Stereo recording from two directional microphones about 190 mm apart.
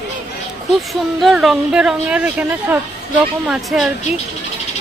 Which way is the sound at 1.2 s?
Centre (ahead or behind).